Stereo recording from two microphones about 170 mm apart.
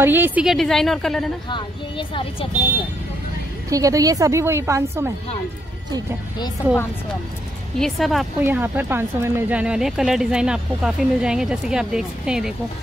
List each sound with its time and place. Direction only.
0.0 s speech: 10° right (ahead or behind)
1.5 s speech: 30° left (ahead or behind)
3.7 s a woman's voice: 20° right (ahead or behind)
7.8 s speech: centre (ahead or behind)
8.4 s speech: 10° right (ahead or behind)